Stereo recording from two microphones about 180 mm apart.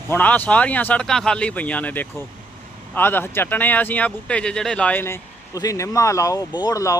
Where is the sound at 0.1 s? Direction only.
10° left (ahead or behind).